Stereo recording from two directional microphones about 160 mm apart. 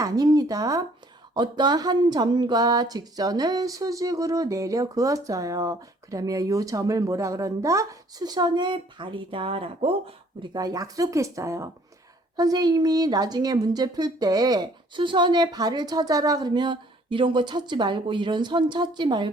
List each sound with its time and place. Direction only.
0.0 s speech: 25° right (ahead or behind)